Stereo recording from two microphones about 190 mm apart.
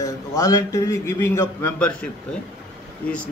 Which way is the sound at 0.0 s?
15° left (ahead or behind).